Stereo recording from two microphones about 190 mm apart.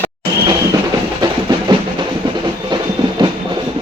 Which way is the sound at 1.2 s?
20° right (ahead or behind).